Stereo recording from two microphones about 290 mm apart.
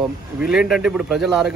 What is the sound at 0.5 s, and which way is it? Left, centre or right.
Speech, centre.